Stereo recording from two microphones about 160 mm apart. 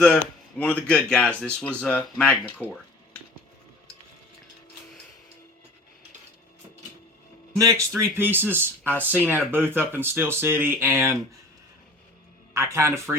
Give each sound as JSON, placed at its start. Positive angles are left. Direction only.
{"t": 0.6, "sound": "speech", "side_deg": 10}
{"t": 7.6, "sound": "speech", "side_deg": -20}
{"t": 12.5, "sound": "speech", "side_deg": -15}